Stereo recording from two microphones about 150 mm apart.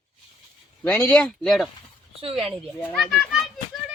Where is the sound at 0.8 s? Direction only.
10° left (ahead or behind).